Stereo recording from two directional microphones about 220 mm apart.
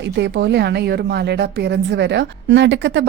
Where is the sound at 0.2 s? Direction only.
50° right (ahead or behind).